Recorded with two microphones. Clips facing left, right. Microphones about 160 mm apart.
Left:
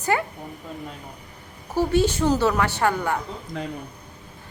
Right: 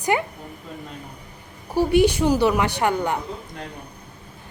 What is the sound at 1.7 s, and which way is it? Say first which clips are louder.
A woman's voice: right 3 dB; 15° right (ahead or behind).